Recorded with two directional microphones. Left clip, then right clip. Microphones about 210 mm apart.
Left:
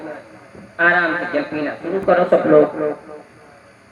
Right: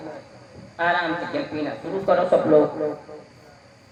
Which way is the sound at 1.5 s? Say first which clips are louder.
Left 5 dB; 50° left (ahead or behind).